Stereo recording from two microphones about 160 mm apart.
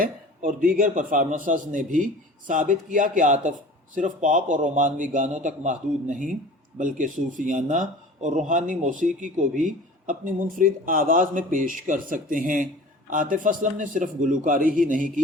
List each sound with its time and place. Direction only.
0.0 s a man's voice: 55° right (ahead or behind)